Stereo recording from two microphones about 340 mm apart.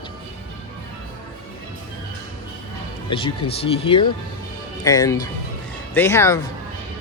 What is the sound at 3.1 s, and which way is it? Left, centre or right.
Speech, centre.